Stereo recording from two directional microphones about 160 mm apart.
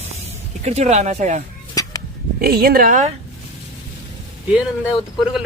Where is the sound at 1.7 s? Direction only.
20° left (ahead or behind).